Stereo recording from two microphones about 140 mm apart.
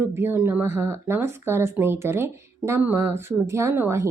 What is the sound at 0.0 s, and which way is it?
Speech, 15° right (ahead or behind).